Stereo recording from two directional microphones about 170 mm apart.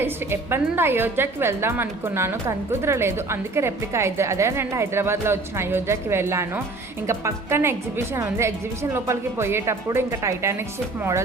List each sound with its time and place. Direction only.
0.0 s a woman's voice: 15° right (ahead or behind)